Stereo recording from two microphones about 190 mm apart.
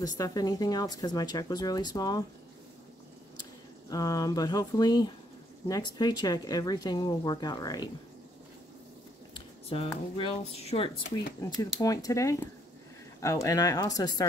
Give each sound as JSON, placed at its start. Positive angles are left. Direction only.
{"t": 0.0, "sound": "speech", "side_deg": 20}
{"t": 3.9, "sound": "speech", "side_deg": 20}
{"t": 9.3, "sound": "a sound", "side_deg": 30}
{"t": 10.1, "sound": "speech", "side_deg": 30}
{"t": 11.4, "sound": "speech", "side_deg": 20}